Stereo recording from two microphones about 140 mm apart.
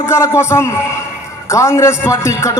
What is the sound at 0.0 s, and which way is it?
A man's voice, 20° left (ahead or behind).